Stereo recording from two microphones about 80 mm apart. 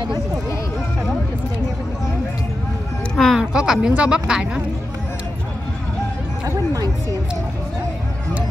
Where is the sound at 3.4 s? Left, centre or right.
Centre.